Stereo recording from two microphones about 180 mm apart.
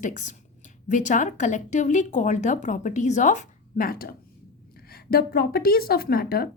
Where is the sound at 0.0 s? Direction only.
45° left (ahead or behind).